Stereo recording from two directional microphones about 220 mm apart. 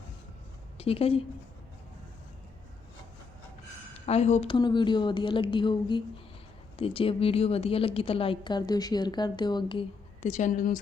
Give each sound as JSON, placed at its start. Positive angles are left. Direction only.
{"t": 0.8, "sound": "a woman's voice", "side_deg": 25}
{"t": 4.0, "sound": "a woman's voice", "side_deg": 30}
{"t": 10.2, "sound": "a woman's voice", "side_deg": 35}